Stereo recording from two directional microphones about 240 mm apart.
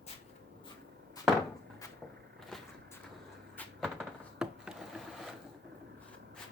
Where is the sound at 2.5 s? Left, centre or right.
Centre.